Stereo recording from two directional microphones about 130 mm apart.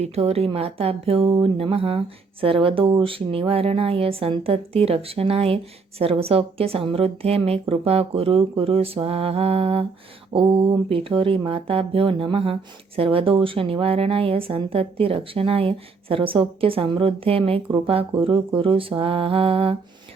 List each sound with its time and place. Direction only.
0.0 s a woman's voice: 50° right (ahead or behind)